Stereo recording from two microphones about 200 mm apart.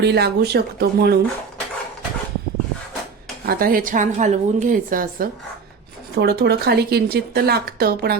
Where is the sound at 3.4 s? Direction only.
45° right (ahead or behind).